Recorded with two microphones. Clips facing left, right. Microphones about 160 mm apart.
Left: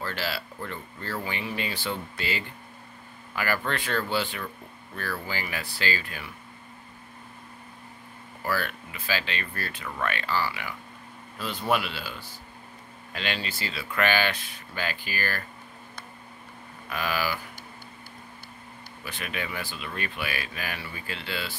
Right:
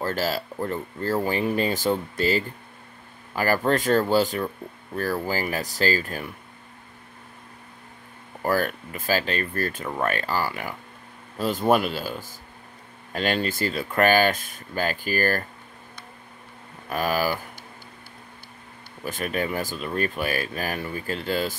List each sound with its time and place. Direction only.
0.0 s speech: 40° right (ahead or behind)
8.4 s speech: 45° right (ahead or behind)
16.9 s speech: 45° right (ahead or behind)
19.0 s speech: 45° right (ahead or behind)